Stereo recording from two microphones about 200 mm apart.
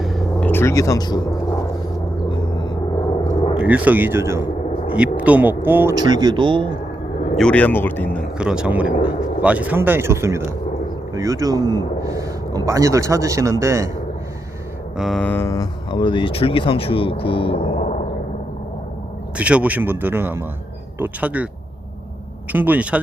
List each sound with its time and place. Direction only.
0.0 s a sound: centre (ahead or behind); by 1.2 s 20° left (ahead or behind)
3.6 s a man's voice: 5° right (ahead or behind); by 6.7 s 25° right (ahead or behind)
7.3 s speech: 5° left (ahead or behind)
8.4 s a man's voice: 5° right (ahead or behind)
14.9 s speech: centre (ahead or behind); by 18.0 s 30° left (ahead or behind)
19.4 s a man's voice: 5° right (ahead or behind)
22.5 s a man's voice: 10° right (ahead or behind)